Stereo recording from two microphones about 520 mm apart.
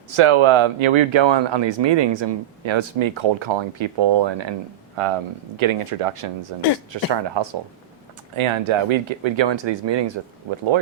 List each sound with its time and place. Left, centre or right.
0.1 s speech: right
5.0 s speech: right
7.1 s speech: right
8.4 s speech: right